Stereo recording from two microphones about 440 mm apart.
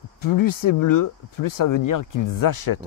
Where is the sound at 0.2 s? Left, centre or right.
Left.